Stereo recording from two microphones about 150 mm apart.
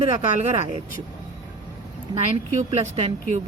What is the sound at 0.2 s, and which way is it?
Speech, 45° right (ahead or behind).